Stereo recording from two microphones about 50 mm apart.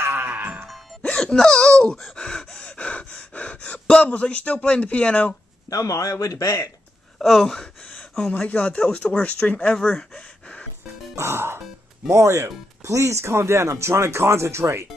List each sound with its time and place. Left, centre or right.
0.0 s music: right
1.0 s wail: centre
1.3 s speech: centre
2.1 s gasp: centre
5.8 s speech: left
7.2 s speech: centre
8.2 s speech: left
9.8 s gasp: left
11.1 s music: right
12.1 s speech: right